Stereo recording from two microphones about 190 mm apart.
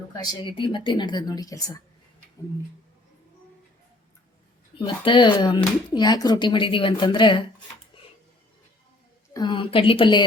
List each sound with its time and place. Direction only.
0.1 s speech: 20° left (ahead or behind)
4.8 s speech: 25° left (ahead or behind)
9.3 s speech: 25° left (ahead or behind)